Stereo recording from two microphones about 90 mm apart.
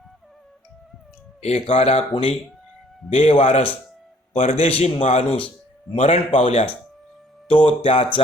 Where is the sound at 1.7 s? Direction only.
90° left.